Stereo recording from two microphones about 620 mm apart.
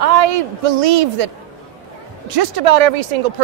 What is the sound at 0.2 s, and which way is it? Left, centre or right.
Speech, right.